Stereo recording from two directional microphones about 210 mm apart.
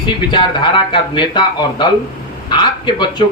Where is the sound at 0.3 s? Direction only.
20° left (ahead or behind).